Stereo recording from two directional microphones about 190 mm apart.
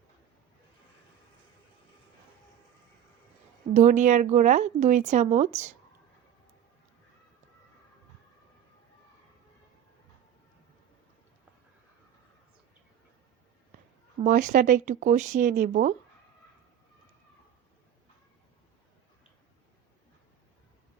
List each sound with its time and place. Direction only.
3.8 s speech: 40° right (ahead or behind)
14.3 s speech: 45° right (ahead or behind)